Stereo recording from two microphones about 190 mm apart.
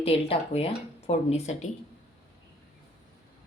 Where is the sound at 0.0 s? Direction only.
30° left (ahead or behind).